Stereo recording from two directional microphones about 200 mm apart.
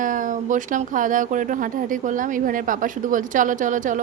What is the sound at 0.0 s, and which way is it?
Speech, 40° right (ahead or behind).